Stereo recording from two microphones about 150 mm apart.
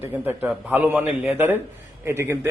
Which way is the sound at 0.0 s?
15° right (ahead or behind).